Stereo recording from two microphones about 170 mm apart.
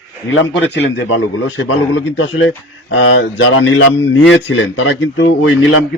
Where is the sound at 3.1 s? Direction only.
90° left.